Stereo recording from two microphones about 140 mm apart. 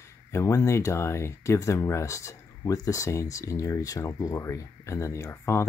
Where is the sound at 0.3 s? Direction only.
20° left (ahead or behind).